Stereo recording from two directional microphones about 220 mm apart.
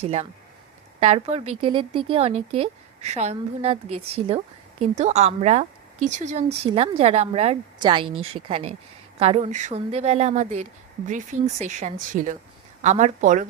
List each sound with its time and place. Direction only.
0.0 s a woman's voice: 30° right (ahead or behind)